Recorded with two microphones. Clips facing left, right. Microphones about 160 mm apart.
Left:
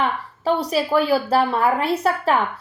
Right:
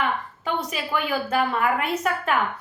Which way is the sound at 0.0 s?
35° left (ahead or behind).